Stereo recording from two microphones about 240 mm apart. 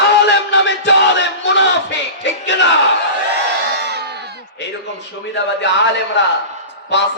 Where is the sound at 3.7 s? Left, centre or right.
Right.